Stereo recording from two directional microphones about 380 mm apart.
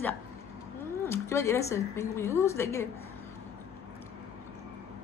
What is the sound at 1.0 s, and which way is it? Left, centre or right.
A woman's voice, centre.